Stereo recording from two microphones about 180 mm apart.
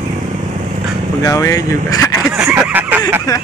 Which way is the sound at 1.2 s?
20° left (ahead or behind).